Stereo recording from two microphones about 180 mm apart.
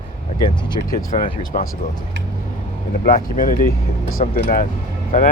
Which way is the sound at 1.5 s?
40° left (ahead or behind).